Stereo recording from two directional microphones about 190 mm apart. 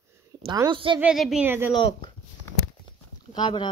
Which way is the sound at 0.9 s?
5° right (ahead or behind).